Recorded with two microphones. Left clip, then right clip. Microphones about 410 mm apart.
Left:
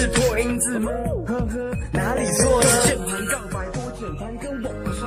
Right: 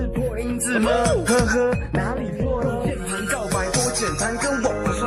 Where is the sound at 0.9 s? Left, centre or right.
Right.